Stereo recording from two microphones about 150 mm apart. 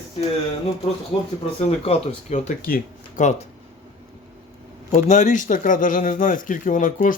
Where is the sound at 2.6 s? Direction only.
75° left (ahead or behind).